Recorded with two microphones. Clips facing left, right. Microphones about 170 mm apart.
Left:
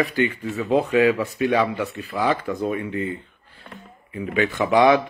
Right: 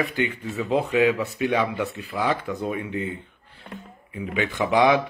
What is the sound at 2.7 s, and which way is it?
Speech, 10° right (ahead or behind).